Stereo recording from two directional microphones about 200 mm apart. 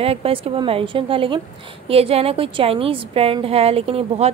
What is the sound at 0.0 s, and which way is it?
A woman's voice, 30° right (ahead or behind).